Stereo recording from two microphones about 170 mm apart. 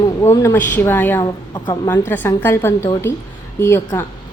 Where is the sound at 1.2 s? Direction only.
25° left (ahead or behind).